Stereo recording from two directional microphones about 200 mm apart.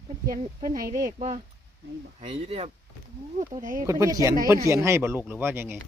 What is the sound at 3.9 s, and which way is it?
Speech, 15° right (ahead or behind).